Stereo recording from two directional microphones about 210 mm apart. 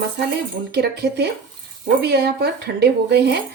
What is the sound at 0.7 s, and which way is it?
A woman's voice, 50° right (ahead or behind).